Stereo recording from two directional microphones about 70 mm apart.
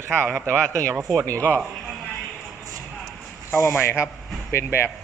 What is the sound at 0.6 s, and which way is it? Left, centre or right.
Speech, centre.